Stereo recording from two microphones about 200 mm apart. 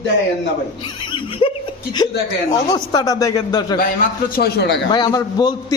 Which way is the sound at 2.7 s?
20° left (ahead or behind).